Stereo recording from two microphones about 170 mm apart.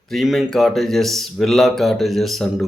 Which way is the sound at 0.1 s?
Centre (ahead or behind).